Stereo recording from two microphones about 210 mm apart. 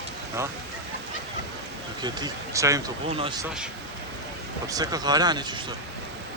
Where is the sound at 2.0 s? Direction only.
20° right (ahead or behind).